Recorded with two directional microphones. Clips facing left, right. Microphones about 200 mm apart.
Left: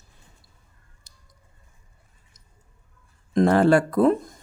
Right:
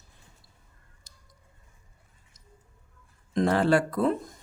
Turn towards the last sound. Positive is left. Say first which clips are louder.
# left 6 dB
turn(degrees=50)  # may be behind; listen again after turning